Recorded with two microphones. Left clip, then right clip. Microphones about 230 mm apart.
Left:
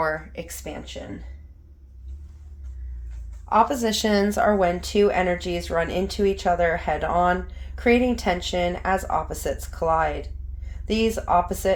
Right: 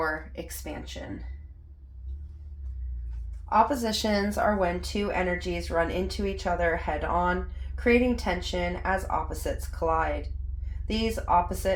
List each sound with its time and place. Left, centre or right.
0.0 s speech: left
3.5 s speech: left